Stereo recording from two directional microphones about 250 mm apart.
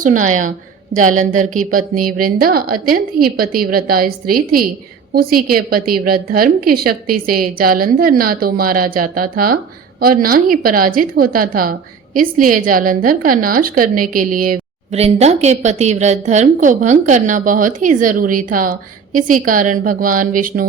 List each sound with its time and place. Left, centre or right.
0.0 s a woman's voice: right